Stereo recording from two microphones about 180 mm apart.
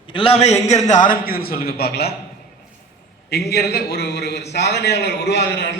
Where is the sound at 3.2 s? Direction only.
65° left (ahead or behind).